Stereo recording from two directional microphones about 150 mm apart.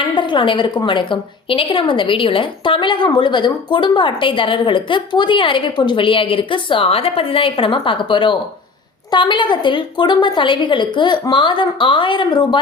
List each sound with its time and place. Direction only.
0.0 s a woman's voice: 35° left (ahead or behind)